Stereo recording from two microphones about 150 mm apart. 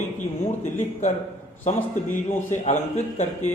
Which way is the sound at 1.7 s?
50° left (ahead or behind).